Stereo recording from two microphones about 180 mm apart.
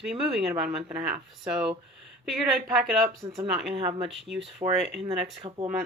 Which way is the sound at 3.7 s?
30° right (ahead or behind).